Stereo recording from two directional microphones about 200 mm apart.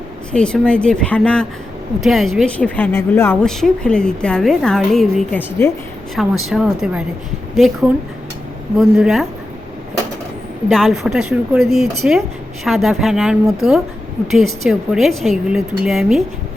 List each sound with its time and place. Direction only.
0.3 s a woman's voice: 5° left (ahead or behind)
6.1 s a woman's voice: centre (ahead or behind)
10.7 s a woman's voice: centre (ahead or behind)